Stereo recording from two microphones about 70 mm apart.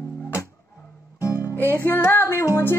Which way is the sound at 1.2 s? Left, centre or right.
Left.